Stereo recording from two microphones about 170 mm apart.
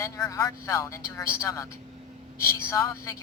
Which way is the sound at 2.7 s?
15° left (ahead or behind).